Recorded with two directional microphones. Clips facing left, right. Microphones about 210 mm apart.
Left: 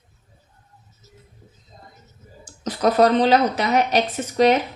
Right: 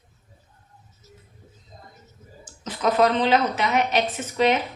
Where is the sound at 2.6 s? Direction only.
40° left (ahead or behind).